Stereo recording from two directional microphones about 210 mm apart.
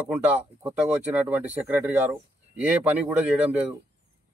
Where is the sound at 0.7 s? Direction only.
5° right (ahead or behind).